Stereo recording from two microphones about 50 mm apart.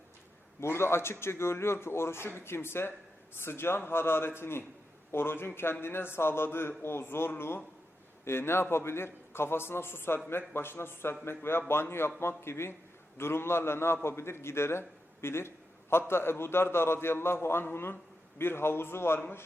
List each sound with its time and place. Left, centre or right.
0.6 s a man's voice: left